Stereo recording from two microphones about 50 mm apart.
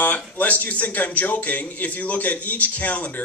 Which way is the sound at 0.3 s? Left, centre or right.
Left.